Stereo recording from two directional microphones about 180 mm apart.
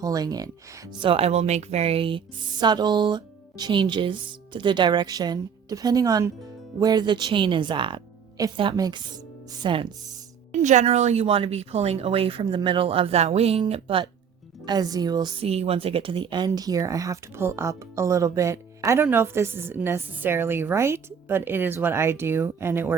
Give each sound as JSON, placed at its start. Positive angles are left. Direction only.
{"t": 0.0, "sound": "speech", "side_deg": -20}
{"t": 0.9, "sound": "speech", "side_deg": -30}
{"t": 10.5, "sound": "a woman's voice", "side_deg": -40}